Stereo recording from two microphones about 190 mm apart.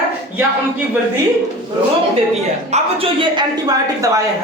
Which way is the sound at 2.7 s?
30° right (ahead or behind).